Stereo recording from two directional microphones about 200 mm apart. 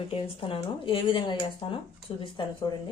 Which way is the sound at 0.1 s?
25° left (ahead or behind).